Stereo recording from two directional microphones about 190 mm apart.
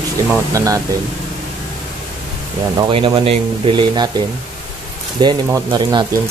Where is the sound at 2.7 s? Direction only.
25° right (ahead or behind).